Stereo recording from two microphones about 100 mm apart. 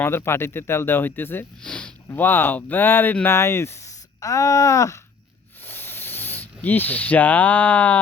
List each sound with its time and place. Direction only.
0.0 s speech: 25° left (ahead or behind)
1.6 s speech: 10° left (ahead or behind)
2.0 s speech: 20° left (ahead or behind)
5.6 s rub: 20° left (ahead or behind)
6.6 s speech: 20° left (ahead or behind)